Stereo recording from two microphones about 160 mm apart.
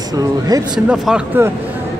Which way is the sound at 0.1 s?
25° right (ahead or behind).